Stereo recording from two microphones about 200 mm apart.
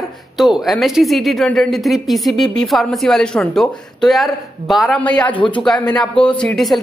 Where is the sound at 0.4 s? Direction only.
Centre (ahead or behind).